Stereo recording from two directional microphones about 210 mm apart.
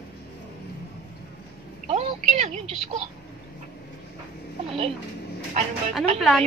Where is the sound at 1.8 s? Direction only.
30° right (ahead or behind).